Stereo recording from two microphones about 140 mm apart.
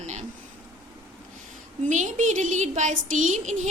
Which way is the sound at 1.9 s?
60° right (ahead or behind).